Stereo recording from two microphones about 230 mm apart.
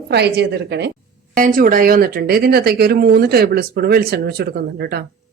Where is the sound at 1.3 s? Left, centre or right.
Right.